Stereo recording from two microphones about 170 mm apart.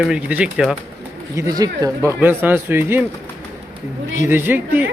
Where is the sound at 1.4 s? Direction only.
20° right (ahead or behind).